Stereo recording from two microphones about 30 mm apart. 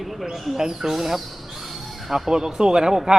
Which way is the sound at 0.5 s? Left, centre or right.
Centre.